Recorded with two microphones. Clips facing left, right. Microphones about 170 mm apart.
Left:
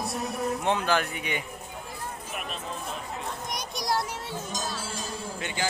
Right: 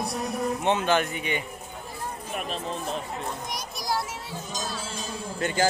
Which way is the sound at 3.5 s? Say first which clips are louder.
Left 2 dB; centre (ahead or behind).